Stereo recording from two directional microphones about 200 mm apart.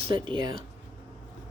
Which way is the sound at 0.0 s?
25° right (ahead or behind).